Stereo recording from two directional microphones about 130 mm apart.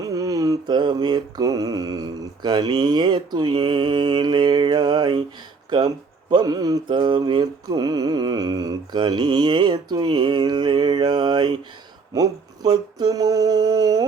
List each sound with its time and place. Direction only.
0.0 s mantra: 25° right (ahead or behind)
6.3 s mantra: 30° right (ahead or behind)
12.1 s a sound: 30° right (ahead or behind)